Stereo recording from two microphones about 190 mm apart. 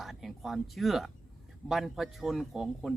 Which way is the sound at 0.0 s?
Centre (ahead or behind).